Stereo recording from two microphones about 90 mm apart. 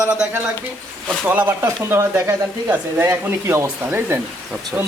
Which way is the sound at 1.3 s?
20° right (ahead or behind).